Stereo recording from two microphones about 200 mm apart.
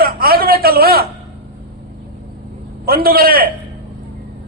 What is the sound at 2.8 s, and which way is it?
Speech, 50° right (ahead or behind).